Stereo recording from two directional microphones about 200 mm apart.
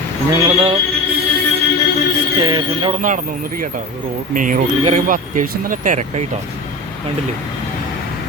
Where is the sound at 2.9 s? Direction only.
40° right (ahead or behind).